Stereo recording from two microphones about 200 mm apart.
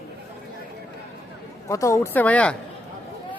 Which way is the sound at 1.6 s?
15° left (ahead or behind).